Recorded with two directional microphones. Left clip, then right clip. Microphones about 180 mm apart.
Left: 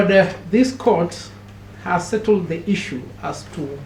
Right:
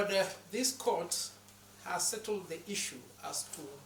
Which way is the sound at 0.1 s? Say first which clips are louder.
Left 18 dB; 30° right (ahead or behind).